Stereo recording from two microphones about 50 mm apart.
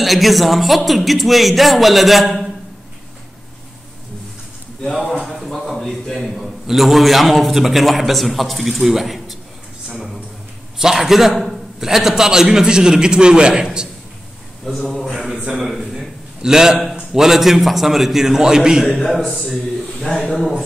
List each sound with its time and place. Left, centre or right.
0.0 s a man's voice: centre
5.2 s a man's voice: centre
10.8 s a man's voice: centre
14.7 s a man's voice: centre
15.5 s a sound: centre
17.1 s a man's voice: centre
18.9 s a man's voice: centre
20.1 s speech: centre
20.3 s a man's voice: centre